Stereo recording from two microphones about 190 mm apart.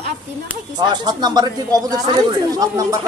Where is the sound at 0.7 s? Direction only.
20° right (ahead or behind).